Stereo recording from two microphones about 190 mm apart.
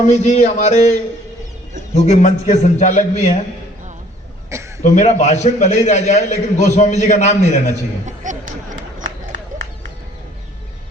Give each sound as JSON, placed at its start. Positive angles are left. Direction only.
{"t": 0.0, "sound": "a man's voice", "side_deg": 40}
{"t": 4.8, "sound": "a man's voice", "side_deg": 35}
{"t": 8.0, "sound": "speech", "side_deg": -40}